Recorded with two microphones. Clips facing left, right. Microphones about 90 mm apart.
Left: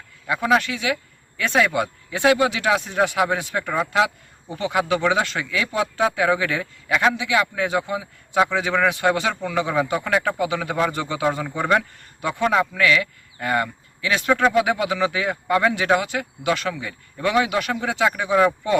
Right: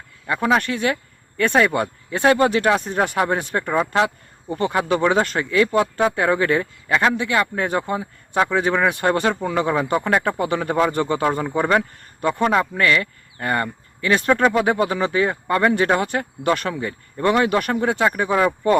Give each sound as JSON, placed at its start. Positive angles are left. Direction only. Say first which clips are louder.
{"t": 0.3, "sound": "speech", "louder": "right 1 dB", "side_deg": -50}